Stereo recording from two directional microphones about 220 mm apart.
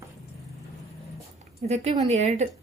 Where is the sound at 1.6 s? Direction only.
30° right (ahead or behind).